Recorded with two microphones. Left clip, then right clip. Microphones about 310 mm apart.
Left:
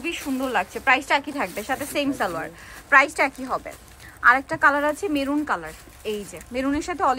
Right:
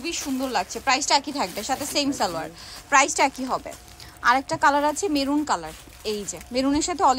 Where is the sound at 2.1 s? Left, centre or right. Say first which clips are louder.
Even; centre.